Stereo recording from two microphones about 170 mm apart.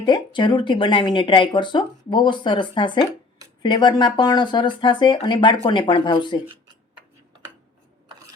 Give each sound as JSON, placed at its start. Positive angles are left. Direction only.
{"t": 0.0, "sound": "speech", "side_deg": 25}